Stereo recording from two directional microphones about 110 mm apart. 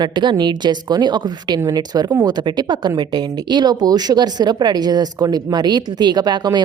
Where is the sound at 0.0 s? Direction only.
45° right (ahead or behind).